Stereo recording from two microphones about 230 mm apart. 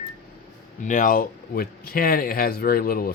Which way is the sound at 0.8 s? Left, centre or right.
Left.